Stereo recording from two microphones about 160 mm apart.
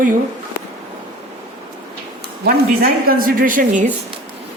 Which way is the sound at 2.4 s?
65° right (ahead or behind).